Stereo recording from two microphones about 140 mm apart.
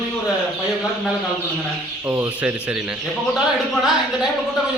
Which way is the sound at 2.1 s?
10° right (ahead or behind).